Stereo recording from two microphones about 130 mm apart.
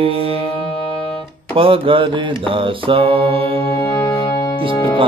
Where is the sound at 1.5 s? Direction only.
45° right (ahead or behind).